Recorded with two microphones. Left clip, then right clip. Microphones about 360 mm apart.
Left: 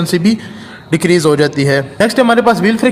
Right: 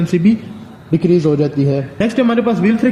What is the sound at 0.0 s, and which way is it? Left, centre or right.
A man's voice, centre.